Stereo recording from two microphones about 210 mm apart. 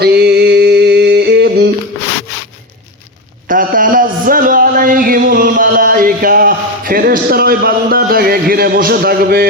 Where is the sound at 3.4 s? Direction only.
40° right (ahead or behind).